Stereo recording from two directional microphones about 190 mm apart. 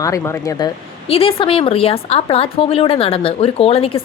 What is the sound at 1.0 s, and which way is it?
Speech, 30° left (ahead or behind).